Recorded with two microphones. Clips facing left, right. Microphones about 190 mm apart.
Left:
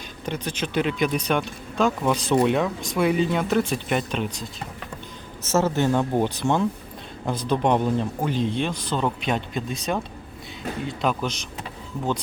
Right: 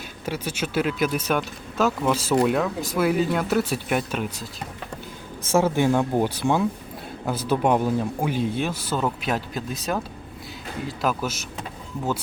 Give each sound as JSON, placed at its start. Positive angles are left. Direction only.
{"t": 0.3, "sound": "speech", "side_deg": -5}
{"t": 5.5, "sound": "speech", "side_deg": -10}